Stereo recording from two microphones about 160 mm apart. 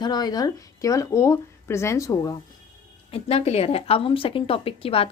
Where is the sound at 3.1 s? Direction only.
40° left (ahead or behind).